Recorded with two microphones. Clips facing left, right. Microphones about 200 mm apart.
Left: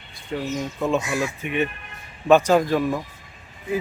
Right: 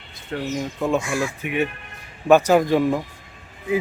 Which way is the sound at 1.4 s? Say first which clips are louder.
Right 1 dB; 10° right (ahead or behind).